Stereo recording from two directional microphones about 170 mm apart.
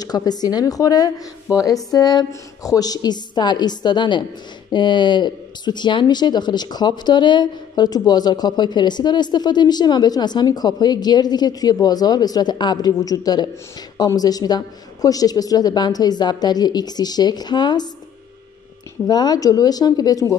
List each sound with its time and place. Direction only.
0.0 s speech: 25° left (ahead or behind)
19.0 s speech: 25° left (ahead or behind)